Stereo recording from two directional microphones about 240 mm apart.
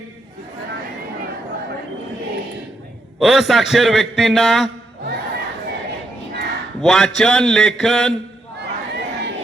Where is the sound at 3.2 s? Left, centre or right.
Centre.